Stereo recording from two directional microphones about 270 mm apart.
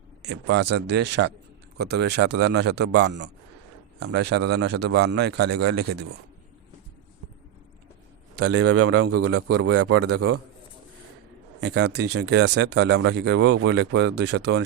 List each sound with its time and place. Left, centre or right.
0.2 s speech: right
8.4 s a man's voice: right
9.5 s speech: right
9.8 s a man's voice: right
11.6 s speech: right